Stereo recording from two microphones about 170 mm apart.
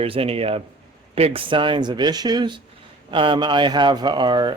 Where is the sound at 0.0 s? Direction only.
35° right (ahead or behind).